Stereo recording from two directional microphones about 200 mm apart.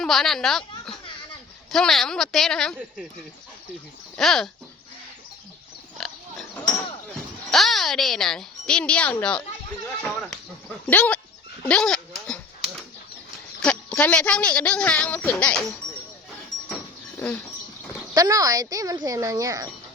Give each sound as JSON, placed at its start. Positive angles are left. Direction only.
{"t": 0.0, "sound": "a woman's voice", "side_deg": 0}
{"t": 4.2, "sound": "a woman's voice", "side_deg": 0}
{"t": 6.0, "sound": "pig", "side_deg": 5}
{"t": 7.5, "sound": "a woman's voice", "side_deg": 0}
{"t": 11.6, "sound": "dog", "side_deg": 5}
{"t": 13.6, "sound": "a woman's voice", "side_deg": 5}
{"t": 17.2, "sound": "speech", "side_deg": 10}
{"t": 18.1, "sound": "speech", "side_deg": -15}